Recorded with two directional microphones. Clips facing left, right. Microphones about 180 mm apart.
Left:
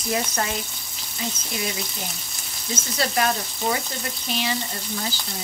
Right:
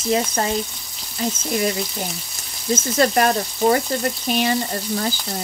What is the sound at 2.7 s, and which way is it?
Speech, 50° right (ahead or behind).